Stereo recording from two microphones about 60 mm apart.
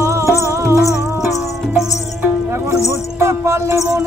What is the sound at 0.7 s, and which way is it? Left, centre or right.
Music, left.